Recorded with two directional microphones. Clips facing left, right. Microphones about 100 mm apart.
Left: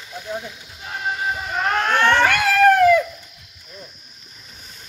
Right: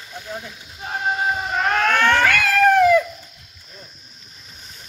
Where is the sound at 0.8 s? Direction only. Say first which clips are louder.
Right 3 dB; 30° right (ahead or behind).